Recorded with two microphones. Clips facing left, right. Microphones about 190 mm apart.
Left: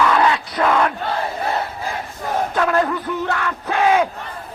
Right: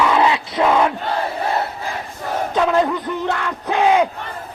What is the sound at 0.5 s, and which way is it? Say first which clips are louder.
Crowd: right 3 dB; 15° right (ahead or behind).